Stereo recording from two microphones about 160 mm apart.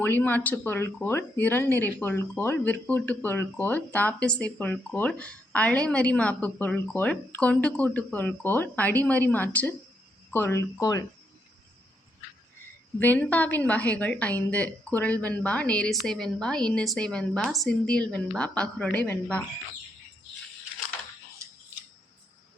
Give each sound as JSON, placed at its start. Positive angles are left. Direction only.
{"t": 0.0, "sound": "speech", "side_deg": 10}
{"t": 13.0, "sound": "speech", "side_deg": 10}